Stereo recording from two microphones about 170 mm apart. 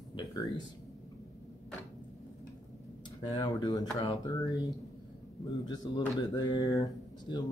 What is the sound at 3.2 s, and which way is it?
Speech, 20° left (ahead or behind).